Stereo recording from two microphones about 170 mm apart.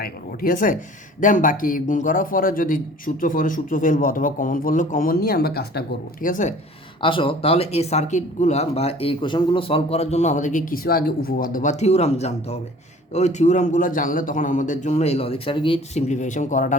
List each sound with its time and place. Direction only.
0.0 s a man's voice: 60° left (ahead or behind)
6.2 s a man's voice: 50° left (ahead or behind)
7.0 s a man's voice: 30° left (ahead or behind); by 16.7 s 45° left (ahead or behind)